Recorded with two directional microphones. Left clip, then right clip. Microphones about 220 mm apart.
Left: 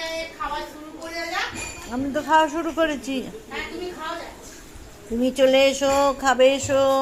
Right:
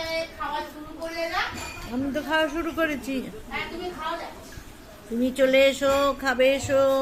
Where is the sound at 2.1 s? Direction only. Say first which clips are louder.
Left 6 dB; 5° right (ahead or behind).